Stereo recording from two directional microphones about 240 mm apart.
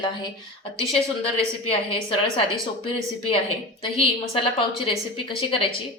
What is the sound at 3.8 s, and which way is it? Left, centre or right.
A woman's voice, left.